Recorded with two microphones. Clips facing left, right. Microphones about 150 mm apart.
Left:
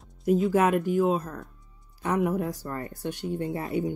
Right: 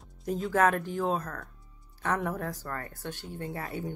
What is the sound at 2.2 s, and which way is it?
Speech, 15° left (ahead or behind).